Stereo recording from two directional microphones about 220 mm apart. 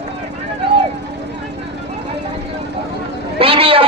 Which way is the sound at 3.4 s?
25° right (ahead or behind).